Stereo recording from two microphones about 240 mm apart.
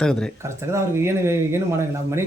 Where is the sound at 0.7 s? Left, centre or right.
Centre.